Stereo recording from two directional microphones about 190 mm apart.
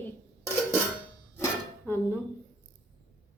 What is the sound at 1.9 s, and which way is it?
Speech, 10° left (ahead or behind).